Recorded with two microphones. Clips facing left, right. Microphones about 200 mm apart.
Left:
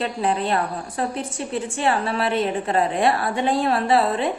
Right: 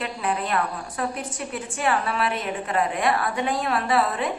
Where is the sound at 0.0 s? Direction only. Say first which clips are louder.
Left 4 dB; 30° left (ahead or behind).